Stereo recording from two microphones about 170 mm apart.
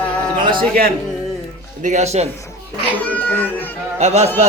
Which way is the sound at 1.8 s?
45° right (ahead or behind).